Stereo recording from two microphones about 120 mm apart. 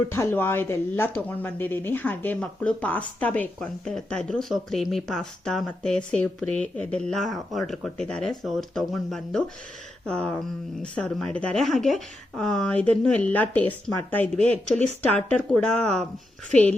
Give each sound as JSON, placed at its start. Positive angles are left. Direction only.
{"t": 0.1, "sound": "speech", "side_deg": 20}
{"t": 7.1, "sound": "speech", "side_deg": 0}